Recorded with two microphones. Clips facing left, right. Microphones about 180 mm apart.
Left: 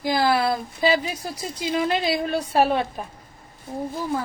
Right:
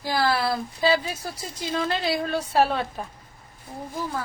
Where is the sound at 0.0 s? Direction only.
15° left (ahead or behind).